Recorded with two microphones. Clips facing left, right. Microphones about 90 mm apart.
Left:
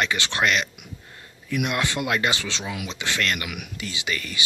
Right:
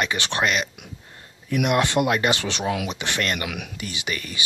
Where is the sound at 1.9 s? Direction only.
25° right (ahead or behind).